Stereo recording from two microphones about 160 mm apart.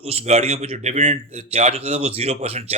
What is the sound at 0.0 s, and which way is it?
A man's voice, 40° right (ahead or behind).